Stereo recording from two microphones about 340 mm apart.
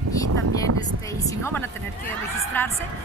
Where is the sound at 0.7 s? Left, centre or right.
Right.